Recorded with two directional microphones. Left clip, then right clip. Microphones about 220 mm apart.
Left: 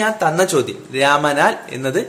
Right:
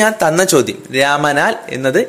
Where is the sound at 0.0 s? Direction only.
25° right (ahead or behind).